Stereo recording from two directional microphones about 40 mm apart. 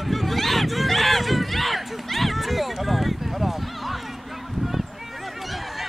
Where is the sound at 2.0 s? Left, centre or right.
Centre.